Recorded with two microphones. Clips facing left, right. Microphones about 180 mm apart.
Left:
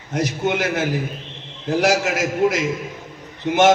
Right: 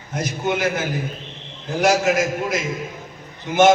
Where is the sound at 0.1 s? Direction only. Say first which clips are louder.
Left 3 dB; 70° left (ahead or behind).